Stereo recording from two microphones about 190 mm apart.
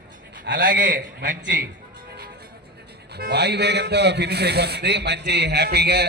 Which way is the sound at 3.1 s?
60° right (ahead or behind).